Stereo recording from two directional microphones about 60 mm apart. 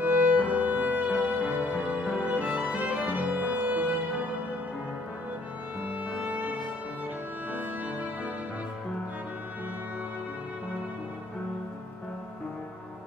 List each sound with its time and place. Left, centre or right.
0.0 s music: right
5.8 s music: right